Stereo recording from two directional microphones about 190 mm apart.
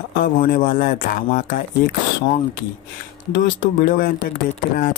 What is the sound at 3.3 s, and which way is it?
Speech, 45° left (ahead or behind).